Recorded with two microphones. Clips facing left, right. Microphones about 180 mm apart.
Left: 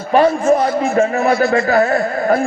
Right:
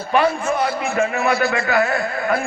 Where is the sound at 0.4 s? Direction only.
30° left (ahead or behind).